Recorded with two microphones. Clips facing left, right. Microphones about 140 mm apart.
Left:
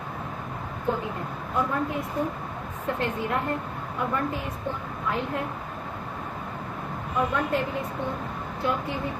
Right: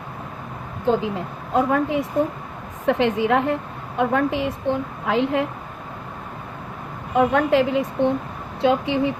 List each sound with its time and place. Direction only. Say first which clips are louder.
0.9 s a woman's voice: right 8 dB; 90° right
7.1 s a woman's voice: right 9 dB; 90° right